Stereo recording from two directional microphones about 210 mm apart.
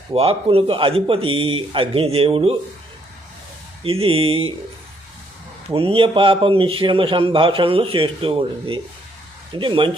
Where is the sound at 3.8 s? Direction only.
25° right (ahead or behind).